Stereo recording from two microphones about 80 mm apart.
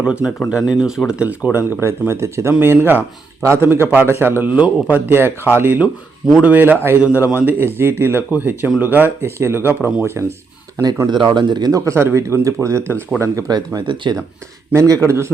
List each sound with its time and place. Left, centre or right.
0.0 s speech: centre
1.5 s a man's voice: right
11.0 s speech: right
11.7 s speech: right
13.8 s speech: right
14.7 s speech: right